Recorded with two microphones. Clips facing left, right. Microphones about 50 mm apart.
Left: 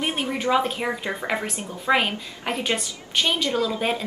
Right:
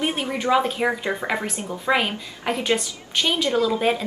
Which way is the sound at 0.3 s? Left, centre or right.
Centre.